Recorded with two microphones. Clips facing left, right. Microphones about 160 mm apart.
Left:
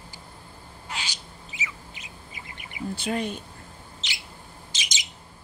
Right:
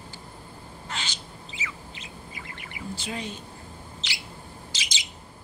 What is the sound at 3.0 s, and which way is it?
Speech, 55° left (ahead or behind).